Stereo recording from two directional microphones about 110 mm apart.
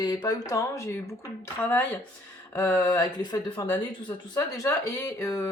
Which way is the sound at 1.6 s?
15° left (ahead or behind).